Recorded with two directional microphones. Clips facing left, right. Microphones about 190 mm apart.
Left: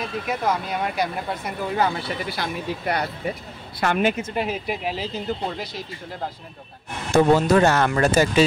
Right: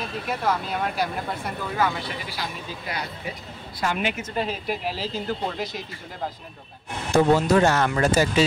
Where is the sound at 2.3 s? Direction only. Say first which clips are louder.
Left 6 dB; 60° left (ahead or behind).